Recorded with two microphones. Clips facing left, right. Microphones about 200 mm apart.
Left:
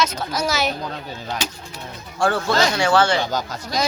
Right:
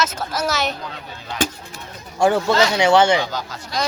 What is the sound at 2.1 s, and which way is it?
A man's voice, 20° right (ahead or behind).